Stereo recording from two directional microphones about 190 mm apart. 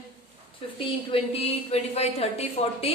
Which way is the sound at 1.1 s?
30° left (ahead or behind).